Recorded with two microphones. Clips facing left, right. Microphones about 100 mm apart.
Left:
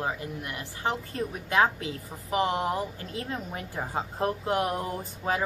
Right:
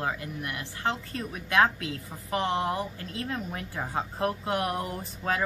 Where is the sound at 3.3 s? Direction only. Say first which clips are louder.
Right 1 dB; 15° left (ahead or behind).